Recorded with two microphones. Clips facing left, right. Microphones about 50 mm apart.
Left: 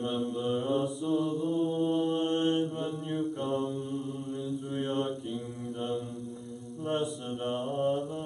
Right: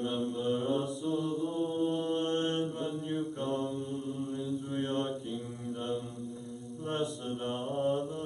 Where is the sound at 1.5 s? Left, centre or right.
Centre.